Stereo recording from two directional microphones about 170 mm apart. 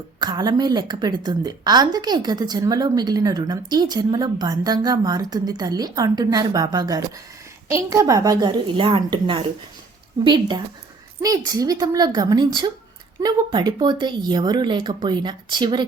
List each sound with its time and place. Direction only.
0.2 s a woman's voice: 25° right (ahead or behind)